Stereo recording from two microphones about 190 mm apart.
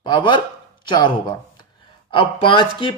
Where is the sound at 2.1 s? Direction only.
25° left (ahead or behind).